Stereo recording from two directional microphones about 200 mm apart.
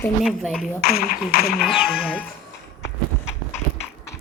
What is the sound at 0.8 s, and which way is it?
Speech, 50° left (ahead or behind).